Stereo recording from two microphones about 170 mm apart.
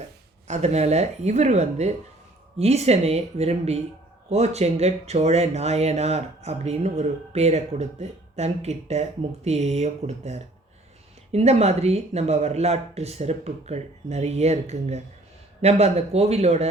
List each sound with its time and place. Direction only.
0.4 s speech: 40° right (ahead or behind)